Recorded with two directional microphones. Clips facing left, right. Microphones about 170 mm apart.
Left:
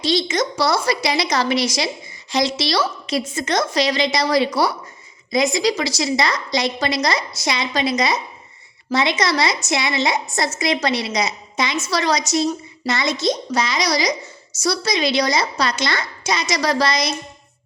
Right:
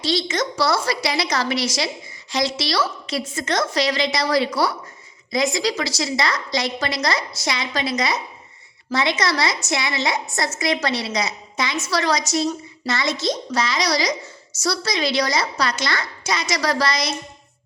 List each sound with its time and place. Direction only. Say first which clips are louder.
0.0 s a woman's voice: left 3 dB; 20° left (ahead or behind)